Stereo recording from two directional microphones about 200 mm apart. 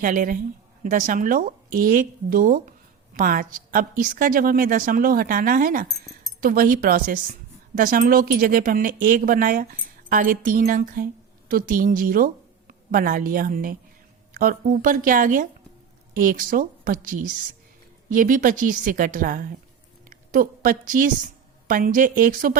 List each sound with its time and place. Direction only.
0.0 s a woman's voice: 45° right (ahead or behind)